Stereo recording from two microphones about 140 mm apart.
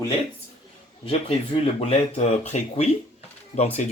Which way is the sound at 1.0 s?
45° left (ahead or behind).